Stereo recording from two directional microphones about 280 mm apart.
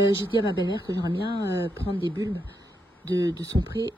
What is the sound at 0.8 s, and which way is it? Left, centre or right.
Speech, centre.